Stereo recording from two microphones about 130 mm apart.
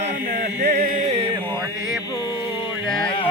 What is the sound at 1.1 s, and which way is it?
Chant, 45° right (ahead or behind).